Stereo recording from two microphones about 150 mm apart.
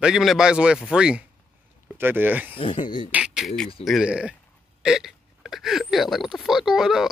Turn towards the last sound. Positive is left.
turn(degrees=-5)  # may be behind; listen again after turning